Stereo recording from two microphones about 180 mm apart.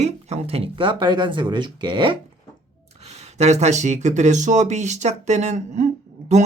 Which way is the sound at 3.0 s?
40° right (ahead or behind).